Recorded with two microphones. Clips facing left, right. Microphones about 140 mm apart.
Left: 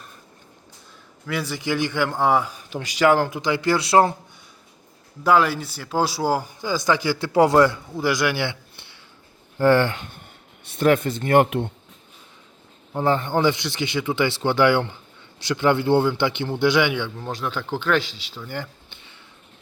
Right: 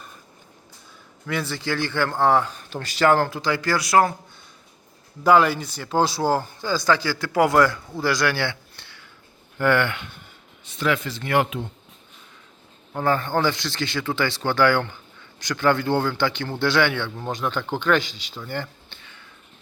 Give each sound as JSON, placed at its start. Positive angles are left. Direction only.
{"t": 1.3, "sound": "a man's voice", "side_deg": 10}
{"t": 5.2, "sound": "a man's voice", "side_deg": 0}
{"t": 9.6, "sound": "speech", "side_deg": 35}
{"t": 12.9, "sound": "speech", "side_deg": 20}
{"t": 17.2, "sound": "speech", "side_deg": 0}